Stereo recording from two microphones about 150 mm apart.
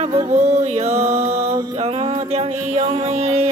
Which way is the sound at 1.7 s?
40° right (ahead or behind).